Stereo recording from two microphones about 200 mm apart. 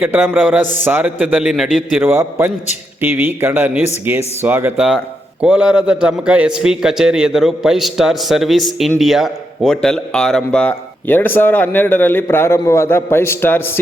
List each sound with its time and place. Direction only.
0.0 s a man's voice: 10° right (ahead or behind); by 13.7 s 10° left (ahead or behind)